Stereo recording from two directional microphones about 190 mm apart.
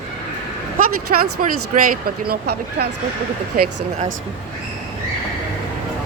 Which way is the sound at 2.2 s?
55° right (ahead or behind).